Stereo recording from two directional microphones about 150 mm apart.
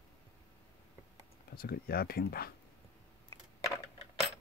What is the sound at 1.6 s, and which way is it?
Speech, 90° left.